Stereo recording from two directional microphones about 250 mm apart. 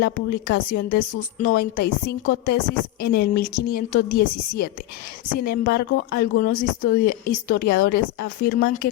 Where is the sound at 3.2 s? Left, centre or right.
Left.